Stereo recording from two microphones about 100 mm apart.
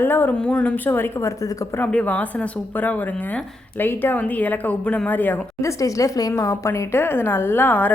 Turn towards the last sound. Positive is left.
turn(degrees=15)  # may be behind; listen again after turning